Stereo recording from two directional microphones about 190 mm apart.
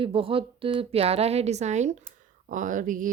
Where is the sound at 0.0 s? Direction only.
30° right (ahead or behind).